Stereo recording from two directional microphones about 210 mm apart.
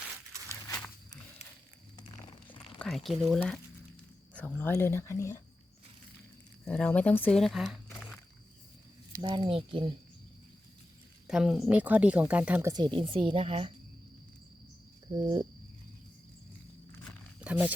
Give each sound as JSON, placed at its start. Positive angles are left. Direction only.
{"t": 0.7, "sound": "walk", "side_deg": 15}
{"t": 2.7, "sound": "speech", "side_deg": 0}
{"t": 6.7, "sound": "speech", "side_deg": 5}
{"t": 7.9, "sound": "a sound", "side_deg": 5}
{"t": 9.2, "sound": "speech", "side_deg": -25}
{"t": 11.3, "sound": "speech", "side_deg": 0}
{"t": 15.1, "sound": "speech", "side_deg": -20}
{"t": 17.4, "sound": "speech", "side_deg": -5}